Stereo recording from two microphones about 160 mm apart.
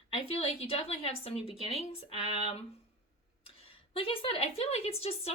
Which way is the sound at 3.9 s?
35° left (ahead or behind).